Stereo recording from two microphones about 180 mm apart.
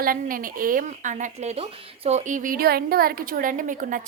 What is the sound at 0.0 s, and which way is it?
A woman's voice, 50° right (ahead or behind).